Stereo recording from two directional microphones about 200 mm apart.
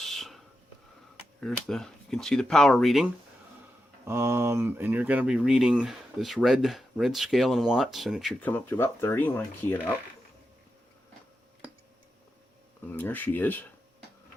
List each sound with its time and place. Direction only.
0.0 s a sound: centre (ahead or behind)
1.4 s speech: centre (ahead or behind)
4.0 s speech: 15° right (ahead or behind); by 9.9 s 10° left (ahead or behind)
12.9 s speech: 10° left (ahead or behind)